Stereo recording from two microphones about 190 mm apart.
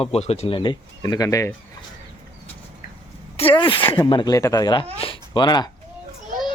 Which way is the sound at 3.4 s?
25° left (ahead or behind).